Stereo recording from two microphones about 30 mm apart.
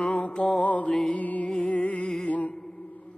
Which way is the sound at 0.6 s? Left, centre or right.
Left.